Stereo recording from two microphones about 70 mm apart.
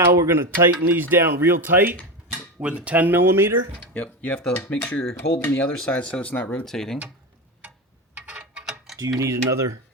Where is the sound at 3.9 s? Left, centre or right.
Centre.